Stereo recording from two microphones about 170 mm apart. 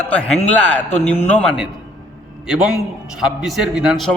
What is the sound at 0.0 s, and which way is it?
A man's voice, 10° left (ahead or behind).